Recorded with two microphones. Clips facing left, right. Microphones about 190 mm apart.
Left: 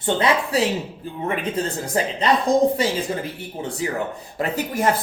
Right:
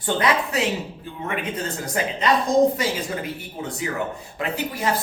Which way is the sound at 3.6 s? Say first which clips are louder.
Left 4 dB; 30° left (ahead or behind).